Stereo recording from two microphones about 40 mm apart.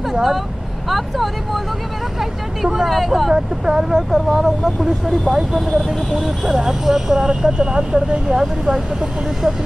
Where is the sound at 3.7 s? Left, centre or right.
Centre.